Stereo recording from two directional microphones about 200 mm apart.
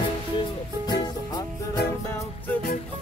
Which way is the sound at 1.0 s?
20° left (ahead or behind).